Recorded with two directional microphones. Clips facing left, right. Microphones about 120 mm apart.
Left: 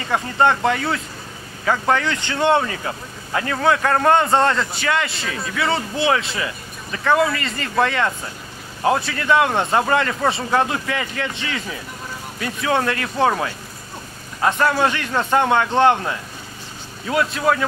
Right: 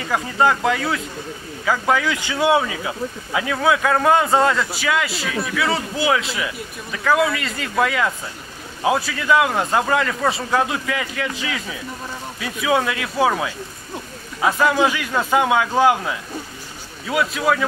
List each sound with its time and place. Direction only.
0.0 s speech: centre (ahead or behind)
14.4 s speech: 5° right (ahead or behind)